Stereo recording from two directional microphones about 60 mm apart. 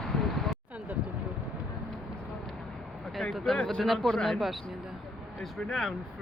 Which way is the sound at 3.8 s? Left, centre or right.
Centre.